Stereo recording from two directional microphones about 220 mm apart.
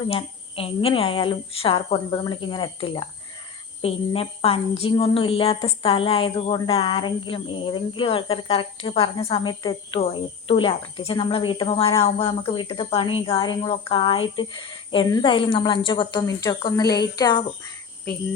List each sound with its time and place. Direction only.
0.1 s a woman's voice: 25° left (ahead or behind)